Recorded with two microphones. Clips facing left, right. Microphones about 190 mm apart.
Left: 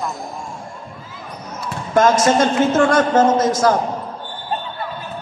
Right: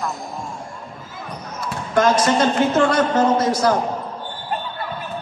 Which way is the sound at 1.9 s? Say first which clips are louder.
Left 3 dB; 45° left (ahead or behind).